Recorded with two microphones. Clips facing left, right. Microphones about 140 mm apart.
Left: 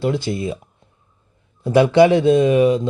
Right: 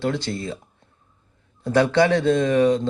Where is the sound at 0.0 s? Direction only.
10° left (ahead or behind).